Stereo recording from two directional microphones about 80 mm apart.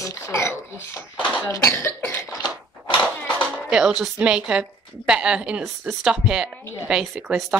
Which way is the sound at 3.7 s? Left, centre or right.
Centre.